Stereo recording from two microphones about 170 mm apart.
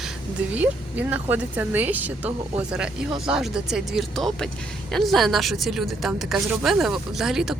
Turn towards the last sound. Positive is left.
turn(degrees=0)  # may be behind; listen again after turning